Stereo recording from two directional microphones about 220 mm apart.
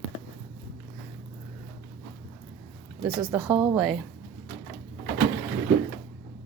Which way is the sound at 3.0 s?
20° right (ahead or behind).